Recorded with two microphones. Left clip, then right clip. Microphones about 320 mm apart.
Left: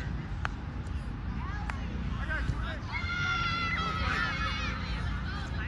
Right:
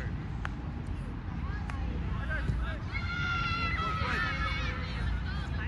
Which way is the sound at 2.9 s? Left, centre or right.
Left.